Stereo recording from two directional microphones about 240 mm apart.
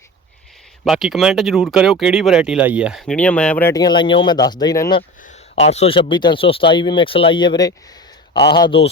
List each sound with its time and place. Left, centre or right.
0.9 s speech: centre